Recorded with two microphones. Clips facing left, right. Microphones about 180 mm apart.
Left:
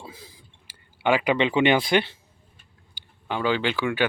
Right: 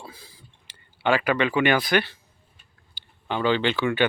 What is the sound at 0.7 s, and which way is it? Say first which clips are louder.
Speech: left 1 dB; 15° left (ahead or behind).